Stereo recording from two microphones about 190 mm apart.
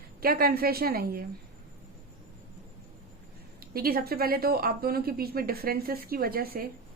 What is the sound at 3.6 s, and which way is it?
Speech, 50° right (ahead or behind).